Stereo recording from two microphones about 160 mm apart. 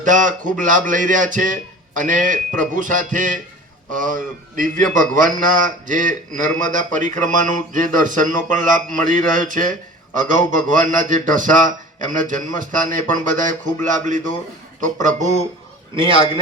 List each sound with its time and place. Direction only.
0.0 s a man's voice: 55° right (ahead or behind)
16.0 s a man's voice: 35° right (ahead or behind)